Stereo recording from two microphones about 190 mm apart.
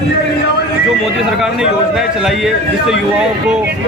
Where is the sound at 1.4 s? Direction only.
5° right (ahead or behind).